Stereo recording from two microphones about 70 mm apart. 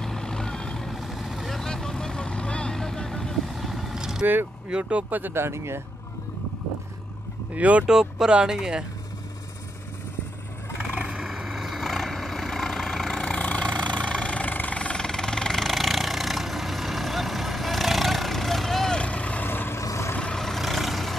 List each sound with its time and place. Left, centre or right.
0.0 s vehicle: centre
4.6 s speech: centre
5.2 s speech: right
7.5 s speech: centre
7.8 s speech: centre
10.8 s vehicle: centre
18.9 s vehicle: centre
19.4 s vehicle: left
19.8 s vehicle: left
20.2 s vehicle: centre